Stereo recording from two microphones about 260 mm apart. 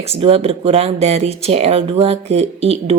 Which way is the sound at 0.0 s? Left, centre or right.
Right.